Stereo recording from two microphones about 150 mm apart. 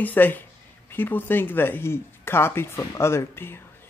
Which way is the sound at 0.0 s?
10° left (ahead or behind).